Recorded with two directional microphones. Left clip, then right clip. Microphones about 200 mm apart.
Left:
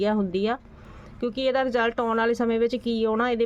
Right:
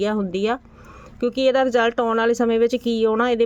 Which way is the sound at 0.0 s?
20° right (ahead or behind).